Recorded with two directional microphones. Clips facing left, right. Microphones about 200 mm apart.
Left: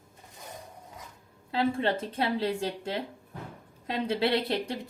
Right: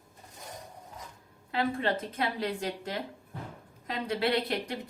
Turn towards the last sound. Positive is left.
turn(degrees=25)  # may be behind; listen again after turning